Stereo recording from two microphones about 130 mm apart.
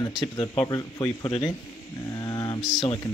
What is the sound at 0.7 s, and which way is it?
Speech, 25° left (ahead or behind).